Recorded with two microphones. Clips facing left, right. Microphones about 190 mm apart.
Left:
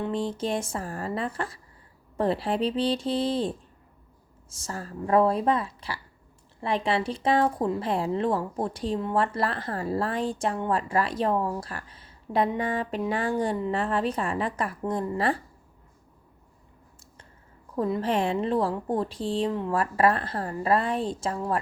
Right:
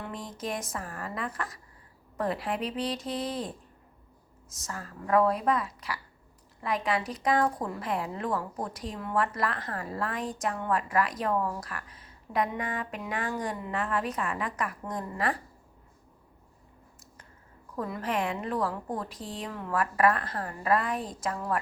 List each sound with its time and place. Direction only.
0.0 s speech: 30° left (ahead or behind)
17.7 s speech: 25° left (ahead or behind)